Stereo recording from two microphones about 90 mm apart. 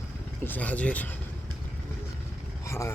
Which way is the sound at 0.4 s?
20° left (ahead or behind).